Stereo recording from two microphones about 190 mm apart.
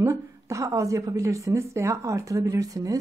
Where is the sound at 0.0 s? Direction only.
15° right (ahead or behind).